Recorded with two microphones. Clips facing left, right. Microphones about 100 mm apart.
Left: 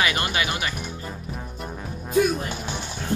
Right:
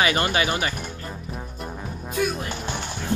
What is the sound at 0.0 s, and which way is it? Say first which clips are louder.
Speech: right 3 dB; 30° right (ahead or behind).